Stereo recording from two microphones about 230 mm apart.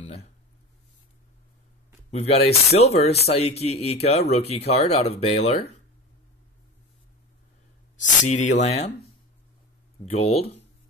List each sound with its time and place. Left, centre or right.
0.0 s a sound: left
2.0 s speech: left
8.3 s speech: left
10.0 s speech: left